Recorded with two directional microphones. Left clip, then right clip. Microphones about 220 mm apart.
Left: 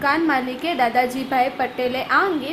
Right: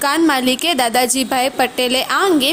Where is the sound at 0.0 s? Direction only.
45° right (ahead or behind).